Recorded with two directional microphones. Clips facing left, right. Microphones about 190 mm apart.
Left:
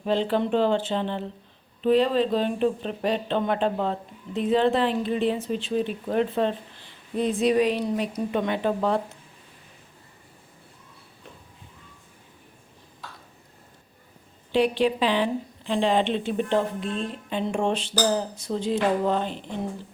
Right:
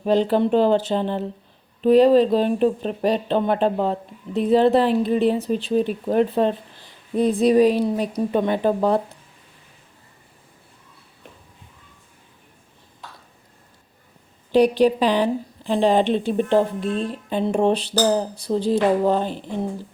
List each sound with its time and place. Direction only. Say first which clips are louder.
0.0 s a woman's voice: right 5 dB; 40° right (ahead or behind)
14.5 s a woman's voice: right 6 dB; 40° right (ahead or behind)